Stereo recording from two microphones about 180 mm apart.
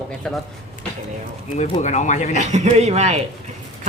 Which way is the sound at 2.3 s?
40° right (ahead or behind).